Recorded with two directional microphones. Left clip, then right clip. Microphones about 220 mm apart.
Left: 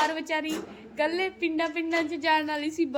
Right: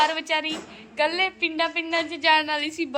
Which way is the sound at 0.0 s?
10° left (ahead or behind).